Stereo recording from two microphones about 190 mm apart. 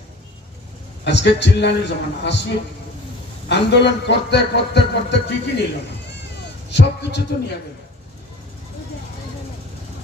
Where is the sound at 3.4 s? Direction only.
65° left (ahead or behind).